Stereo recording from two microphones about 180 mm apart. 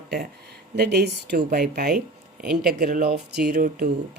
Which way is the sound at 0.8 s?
70° right (ahead or behind).